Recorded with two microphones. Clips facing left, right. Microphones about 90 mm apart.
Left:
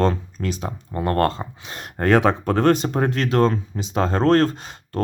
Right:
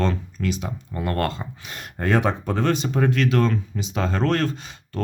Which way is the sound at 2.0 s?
70° left (ahead or behind).